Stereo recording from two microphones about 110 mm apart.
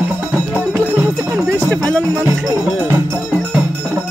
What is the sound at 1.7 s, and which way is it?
Music, 10° left (ahead or behind).